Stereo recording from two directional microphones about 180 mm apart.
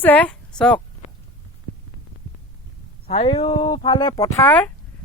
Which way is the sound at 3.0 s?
35° left (ahead or behind).